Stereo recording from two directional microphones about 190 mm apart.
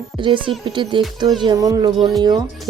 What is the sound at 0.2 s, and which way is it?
Speech, 25° right (ahead or behind).